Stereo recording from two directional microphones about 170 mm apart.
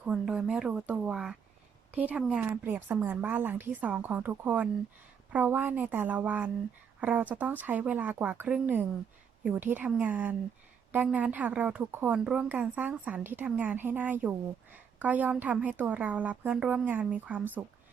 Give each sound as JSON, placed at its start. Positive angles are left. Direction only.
{"t": 0.0, "sound": "a woman's voice", "side_deg": -5}